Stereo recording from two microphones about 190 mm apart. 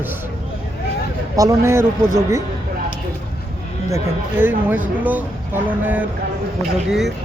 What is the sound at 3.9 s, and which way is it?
Speech, 15° right (ahead or behind).